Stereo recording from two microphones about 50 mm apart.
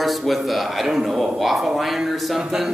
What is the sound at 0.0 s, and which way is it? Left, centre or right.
A man's voice, centre.